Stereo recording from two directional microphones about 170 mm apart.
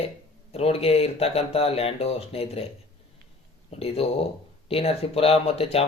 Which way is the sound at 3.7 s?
35° left (ahead or behind).